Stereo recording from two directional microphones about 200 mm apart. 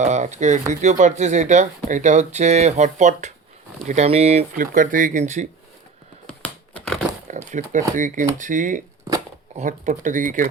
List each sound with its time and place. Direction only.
0.0 s speech: 35° right (ahead or behind)
6.2 s computer keyboard: 5° left (ahead or behind)
7.5 s speech: 40° right (ahead or behind)